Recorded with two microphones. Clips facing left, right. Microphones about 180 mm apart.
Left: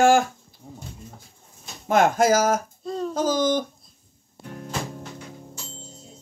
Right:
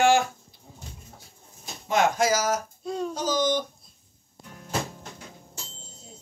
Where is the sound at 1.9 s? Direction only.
50° left (ahead or behind).